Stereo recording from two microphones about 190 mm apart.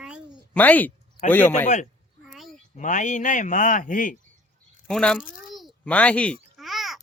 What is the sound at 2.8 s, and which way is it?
A man's voice, 40° left (ahead or behind).